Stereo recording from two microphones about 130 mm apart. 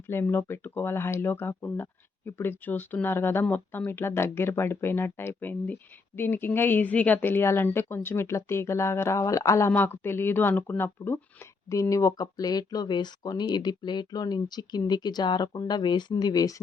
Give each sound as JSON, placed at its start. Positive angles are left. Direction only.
{"t": 0.1, "sound": "speech", "side_deg": 15}